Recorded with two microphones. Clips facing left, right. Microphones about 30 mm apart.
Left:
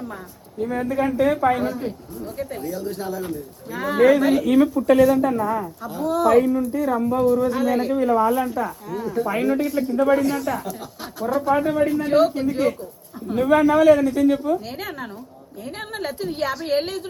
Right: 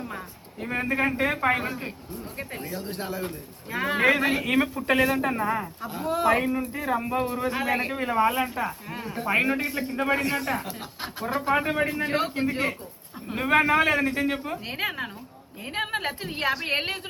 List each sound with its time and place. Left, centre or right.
0.7 s speech: right
15.8 s a woman's voice: right
16.0 s a woman's voice: right